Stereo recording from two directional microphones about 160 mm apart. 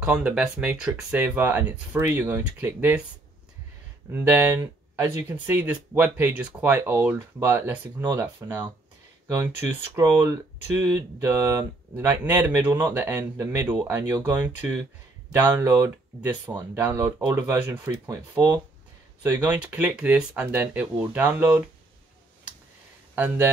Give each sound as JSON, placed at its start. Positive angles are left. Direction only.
{"t": 0.0, "sound": "speech", "side_deg": -5}
{"t": 4.1, "sound": "speech", "side_deg": -15}
{"t": 23.1, "sound": "speech", "side_deg": -10}